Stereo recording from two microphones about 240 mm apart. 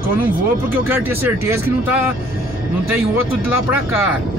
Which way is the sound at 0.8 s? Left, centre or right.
Centre.